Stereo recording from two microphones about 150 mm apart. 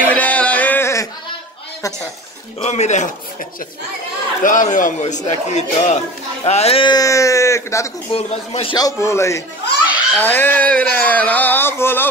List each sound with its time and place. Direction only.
0.1 s a sound: 10° left (ahead or behind)
2.6 s speech: 50° left (ahead or behind)
4.4 s a man's voice: 60° left (ahead or behind); by 7.9 s 20° left (ahead or behind)
8.1 s speech: 45° left (ahead or behind)
8.7 s a man's voice: 20° left (ahead or behind)